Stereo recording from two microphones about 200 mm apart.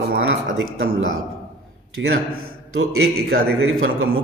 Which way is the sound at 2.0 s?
55° right (ahead or behind).